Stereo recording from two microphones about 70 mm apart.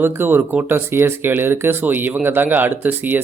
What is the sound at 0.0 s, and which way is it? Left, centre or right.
Speech, right.